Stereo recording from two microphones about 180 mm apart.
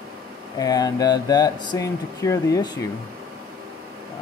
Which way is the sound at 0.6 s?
20° left (ahead or behind).